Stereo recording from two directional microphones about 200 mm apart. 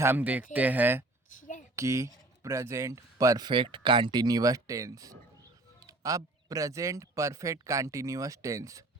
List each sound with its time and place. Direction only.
0.0 s speech: 10° right (ahead or behind)
1.4 s a sound: 40° left (ahead or behind)
1.7 s speech: 15° right (ahead or behind)